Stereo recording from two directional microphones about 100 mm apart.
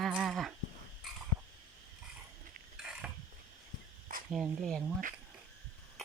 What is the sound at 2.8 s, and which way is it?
Mechanisms, 15° right (ahead or behind).